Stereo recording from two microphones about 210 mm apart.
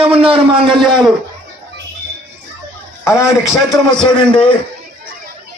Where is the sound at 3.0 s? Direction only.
15° left (ahead or behind).